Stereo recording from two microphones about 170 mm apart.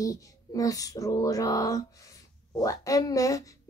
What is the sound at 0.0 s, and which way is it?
Speech, 20° left (ahead or behind).